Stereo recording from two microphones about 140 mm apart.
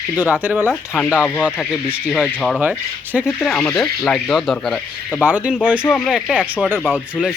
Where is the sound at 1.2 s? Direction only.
10° left (ahead or behind).